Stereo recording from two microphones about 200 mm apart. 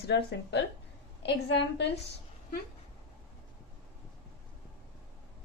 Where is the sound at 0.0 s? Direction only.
55° left (ahead or behind).